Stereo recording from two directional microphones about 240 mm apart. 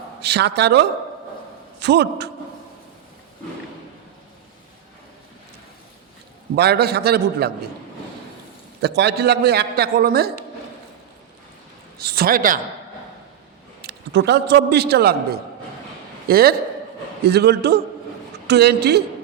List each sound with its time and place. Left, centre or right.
0.2 s a man's voice: right
6.6 s a man's voice: right
8.8 s a man's voice: right
11.9 s a man's voice: right
13.8 s a man's voice: right